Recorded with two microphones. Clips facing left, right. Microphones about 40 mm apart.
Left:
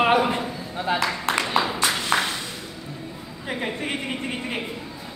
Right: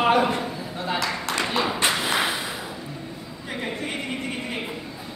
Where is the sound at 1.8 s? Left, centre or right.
Right.